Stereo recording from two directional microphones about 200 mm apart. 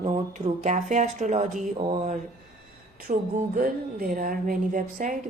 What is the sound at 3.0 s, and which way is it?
A woman's voice, 45° right (ahead or behind).